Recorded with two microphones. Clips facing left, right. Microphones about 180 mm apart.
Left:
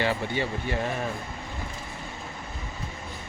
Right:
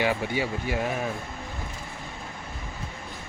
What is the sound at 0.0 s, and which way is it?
Speech, 10° right (ahead or behind).